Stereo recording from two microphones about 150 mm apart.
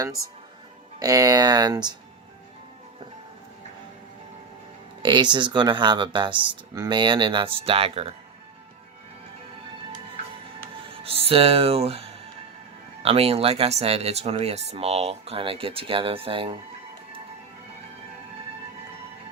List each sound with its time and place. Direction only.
0.9 s speech: 25° right (ahead or behind)
5.0 s speech: 30° right (ahead or behind)
11.0 s speech: 40° right (ahead or behind)